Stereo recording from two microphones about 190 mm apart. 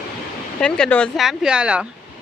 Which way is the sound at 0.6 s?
5° left (ahead or behind).